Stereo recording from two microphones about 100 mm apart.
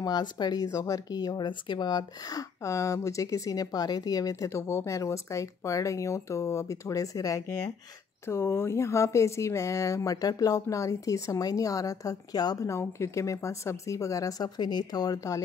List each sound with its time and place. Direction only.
0.0 s speech: 45° left (ahead or behind)
0.7 s speech: 30° left (ahead or behind)